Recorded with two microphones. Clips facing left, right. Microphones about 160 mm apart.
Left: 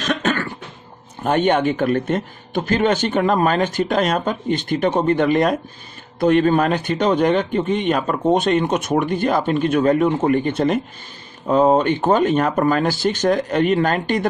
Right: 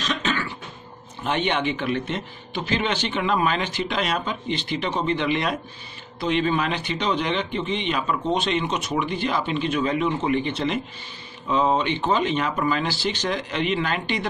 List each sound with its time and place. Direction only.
0.0 s cough: 55° left (ahead or behind)
1.2 s a man's voice: 45° left (ahead or behind)